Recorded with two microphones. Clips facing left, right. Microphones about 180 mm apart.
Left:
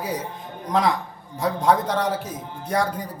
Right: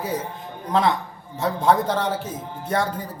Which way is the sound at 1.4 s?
25° right (ahead or behind).